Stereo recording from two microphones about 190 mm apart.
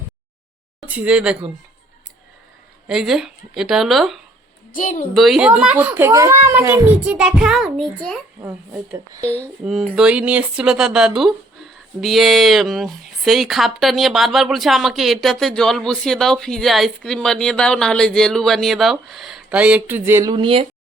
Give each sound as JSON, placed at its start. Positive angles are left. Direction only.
{"t": 0.9, "sound": "speech", "side_deg": -5}
{"t": 2.8, "sound": "speech", "side_deg": -5}
{"t": 4.7, "sound": "a woman's voice", "side_deg": 45}
{"t": 5.1, "sound": "speech", "side_deg": 0}
{"t": 8.4, "sound": "a woman's voice", "side_deg": -10}